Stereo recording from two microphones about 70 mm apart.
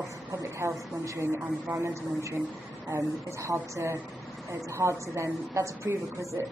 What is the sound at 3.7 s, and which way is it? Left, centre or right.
A woman's voice, right.